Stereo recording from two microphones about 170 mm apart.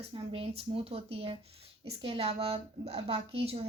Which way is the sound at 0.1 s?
30° right (ahead or behind).